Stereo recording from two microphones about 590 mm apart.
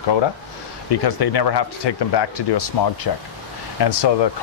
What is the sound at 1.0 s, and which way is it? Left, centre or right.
Speech, left.